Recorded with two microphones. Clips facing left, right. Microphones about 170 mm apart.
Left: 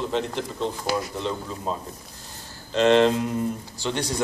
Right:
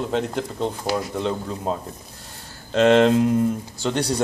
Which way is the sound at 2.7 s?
50° right (ahead or behind).